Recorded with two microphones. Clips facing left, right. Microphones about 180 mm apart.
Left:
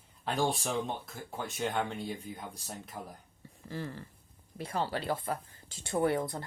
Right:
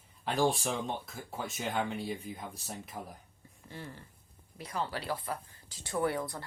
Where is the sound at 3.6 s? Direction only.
40° left (ahead or behind).